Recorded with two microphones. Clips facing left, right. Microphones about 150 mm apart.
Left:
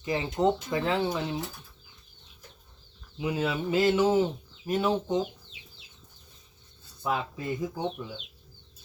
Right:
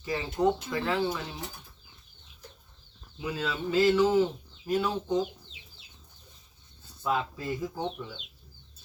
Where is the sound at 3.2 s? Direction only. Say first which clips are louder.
Left 4 dB; 20° left (ahead or behind).